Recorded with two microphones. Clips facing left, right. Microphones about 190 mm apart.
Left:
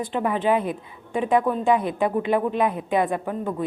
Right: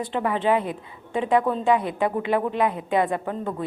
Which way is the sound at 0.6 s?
20° right (ahead or behind).